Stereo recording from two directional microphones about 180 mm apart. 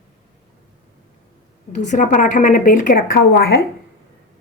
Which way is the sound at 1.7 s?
45° left (ahead or behind).